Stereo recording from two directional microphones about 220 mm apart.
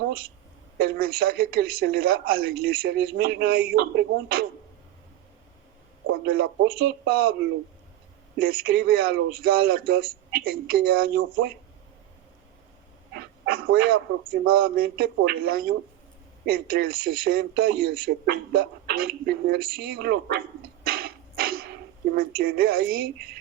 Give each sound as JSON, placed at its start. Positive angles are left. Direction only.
{"t": 0.8, "sound": "speech", "side_deg": -45}
{"t": 6.2, "sound": "speech", "side_deg": -45}
{"t": 8.4, "sound": "speech", "side_deg": -45}
{"t": 13.1, "sound": "speech", "side_deg": -45}
{"t": 20.8, "sound": "a sound", "side_deg": -45}
{"t": 22.1, "sound": "speech", "side_deg": -45}